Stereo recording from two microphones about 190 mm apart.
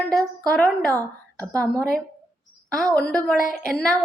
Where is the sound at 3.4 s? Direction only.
45° left (ahead or behind).